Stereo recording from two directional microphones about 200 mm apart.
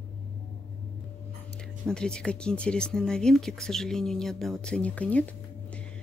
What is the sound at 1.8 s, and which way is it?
Speech, 5° left (ahead or behind).